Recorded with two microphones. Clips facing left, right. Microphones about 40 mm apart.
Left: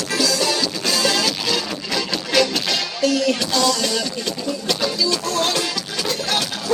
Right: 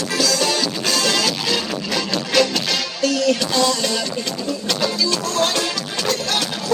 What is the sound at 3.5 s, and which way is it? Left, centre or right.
Music, right.